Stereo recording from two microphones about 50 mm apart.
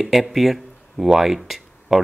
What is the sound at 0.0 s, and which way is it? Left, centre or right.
Speech, centre.